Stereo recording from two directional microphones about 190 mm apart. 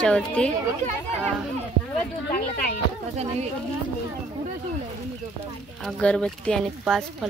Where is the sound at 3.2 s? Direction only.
35° right (ahead or behind).